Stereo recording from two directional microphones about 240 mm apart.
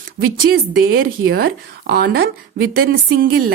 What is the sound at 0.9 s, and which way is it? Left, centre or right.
Speech, right.